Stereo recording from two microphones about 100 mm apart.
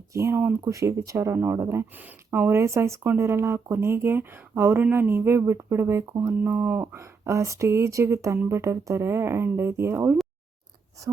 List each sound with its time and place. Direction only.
0.1 s speech: 30° right (ahead or behind)